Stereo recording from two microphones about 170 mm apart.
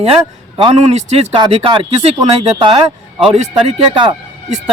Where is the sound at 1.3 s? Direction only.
30° right (ahead or behind).